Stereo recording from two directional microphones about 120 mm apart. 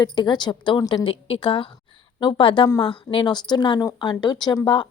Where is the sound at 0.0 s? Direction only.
40° left (ahead or behind).